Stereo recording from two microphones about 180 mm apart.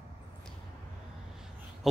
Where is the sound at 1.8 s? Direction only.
Centre (ahead or behind).